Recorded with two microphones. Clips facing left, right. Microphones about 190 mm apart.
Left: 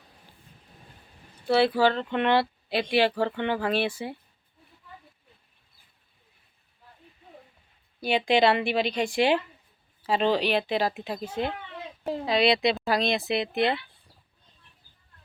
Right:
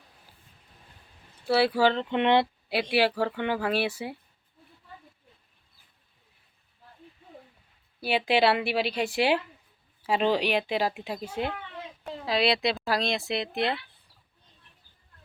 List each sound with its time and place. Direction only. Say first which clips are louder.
1.5 s speech: left 1 dB; 10° right (ahead or behind)
3.2 s speech: left 1 dB; 5° right (ahead or behind)
8.0 s speech: left 2 dB; 5° right (ahead or behind)